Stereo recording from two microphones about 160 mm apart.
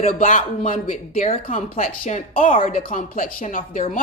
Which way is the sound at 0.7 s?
55° left (ahead or behind).